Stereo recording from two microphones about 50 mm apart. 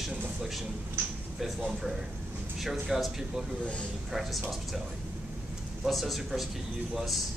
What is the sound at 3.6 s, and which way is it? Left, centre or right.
Speech, left.